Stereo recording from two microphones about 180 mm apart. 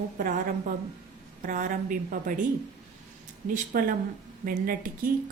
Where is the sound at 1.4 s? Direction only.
45° right (ahead or behind).